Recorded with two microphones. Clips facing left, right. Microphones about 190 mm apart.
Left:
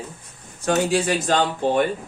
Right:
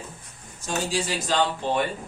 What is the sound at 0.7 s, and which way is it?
Speech, 60° left (ahead or behind).